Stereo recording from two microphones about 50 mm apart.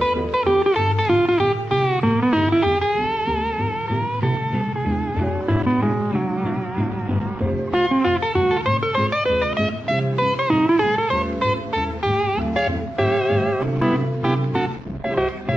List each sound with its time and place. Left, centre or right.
0.0 s music: centre
2.0 s music: centre
5.5 s music: centre
7.9 s music: centre
12.5 s music: centre